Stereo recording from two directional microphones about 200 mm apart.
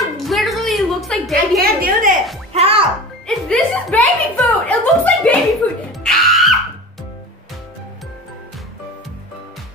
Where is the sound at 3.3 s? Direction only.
5° left (ahead or behind).